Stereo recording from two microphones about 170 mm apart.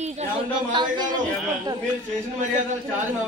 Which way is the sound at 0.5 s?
25° right (ahead or behind).